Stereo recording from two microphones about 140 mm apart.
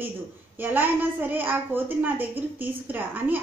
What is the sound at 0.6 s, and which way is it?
A woman's voice, 15° right (ahead or behind).